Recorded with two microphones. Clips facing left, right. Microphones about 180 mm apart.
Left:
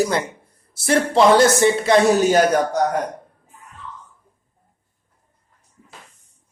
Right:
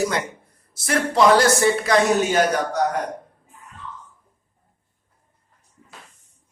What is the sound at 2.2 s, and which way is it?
Speech, 40° left (ahead or behind).